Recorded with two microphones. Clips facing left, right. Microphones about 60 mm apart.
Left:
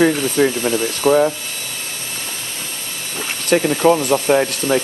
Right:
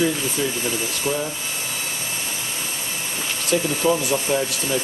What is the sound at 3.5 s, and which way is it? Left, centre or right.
Speech, left.